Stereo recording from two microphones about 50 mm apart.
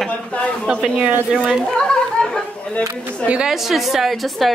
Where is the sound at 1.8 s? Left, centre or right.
Centre.